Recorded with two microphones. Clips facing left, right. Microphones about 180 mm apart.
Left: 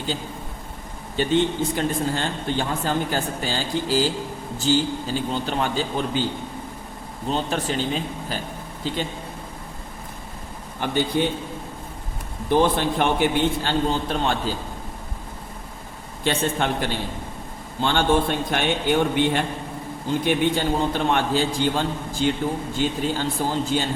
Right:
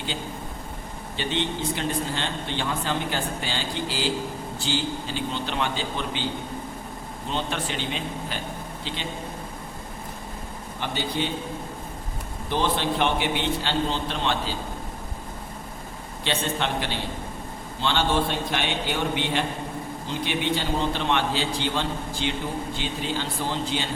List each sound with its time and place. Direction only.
1.1 s a man's voice: 45° left (ahead or behind)
7.3 s speech: 40° left (ahead or behind)
10.8 s a man's voice: 50° left (ahead or behind)
12.5 s a man's voice: 50° left (ahead or behind)
16.2 s a man's voice: 45° left (ahead or behind)